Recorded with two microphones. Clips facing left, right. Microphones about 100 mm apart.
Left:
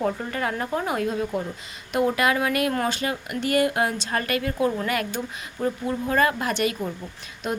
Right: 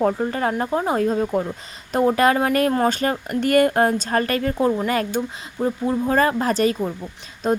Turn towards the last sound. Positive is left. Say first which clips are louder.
# right 7 dB
turn(degrees=-35)  # may be behind; listen again after turning